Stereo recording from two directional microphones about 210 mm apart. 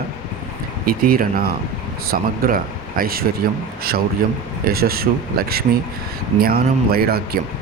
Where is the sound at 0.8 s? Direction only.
45° right (ahead or behind).